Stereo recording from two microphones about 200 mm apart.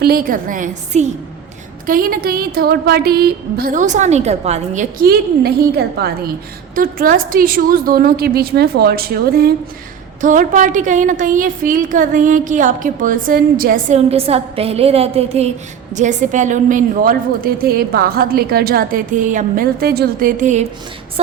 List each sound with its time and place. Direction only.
0.0 s a woman's voice: 50° right (ahead or behind)
1.9 s a woman's voice: 45° right (ahead or behind)